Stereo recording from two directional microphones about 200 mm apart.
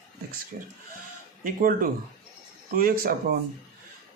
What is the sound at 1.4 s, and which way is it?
Speech, 45° right (ahead or behind).